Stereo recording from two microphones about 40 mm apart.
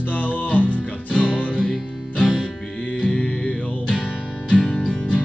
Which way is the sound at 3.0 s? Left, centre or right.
Left.